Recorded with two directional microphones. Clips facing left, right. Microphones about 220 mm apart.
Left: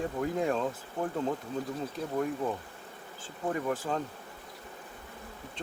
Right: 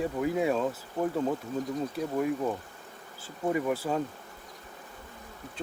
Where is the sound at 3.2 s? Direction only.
10° right (ahead or behind).